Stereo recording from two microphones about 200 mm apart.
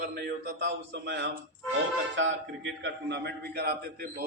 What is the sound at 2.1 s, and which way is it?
A man's voice, 70° right (ahead or behind).